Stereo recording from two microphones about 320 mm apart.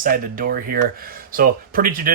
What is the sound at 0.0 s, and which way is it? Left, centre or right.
Speech, right.